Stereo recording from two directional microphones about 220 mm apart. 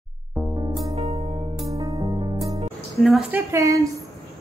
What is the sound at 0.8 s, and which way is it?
Music, 25° right (ahead or behind).